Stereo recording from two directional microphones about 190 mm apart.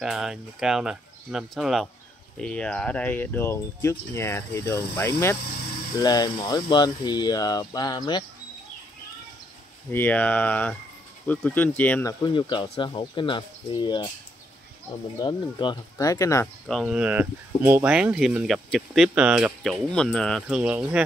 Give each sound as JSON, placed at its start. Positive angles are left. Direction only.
{"t": 0.0, "sound": "speech", "side_deg": 0}
{"t": 9.8, "sound": "speech", "side_deg": 10}
{"t": 15.1, "sound": "speech", "side_deg": 20}
{"t": 16.6, "sound": "speech", "side_deg": 0}